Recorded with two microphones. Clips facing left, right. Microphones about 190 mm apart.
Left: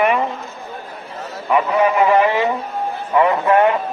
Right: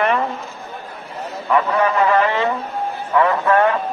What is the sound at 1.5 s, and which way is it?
A man's voice, 15° left (ahead or behind).